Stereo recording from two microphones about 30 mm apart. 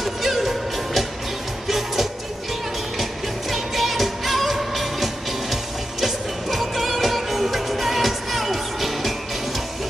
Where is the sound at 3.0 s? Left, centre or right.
Centre.